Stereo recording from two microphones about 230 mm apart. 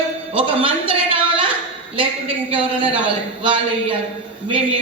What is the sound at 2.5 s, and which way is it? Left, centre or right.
Speech, right.